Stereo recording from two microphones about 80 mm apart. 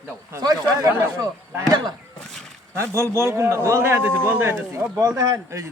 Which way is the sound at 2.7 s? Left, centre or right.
Right.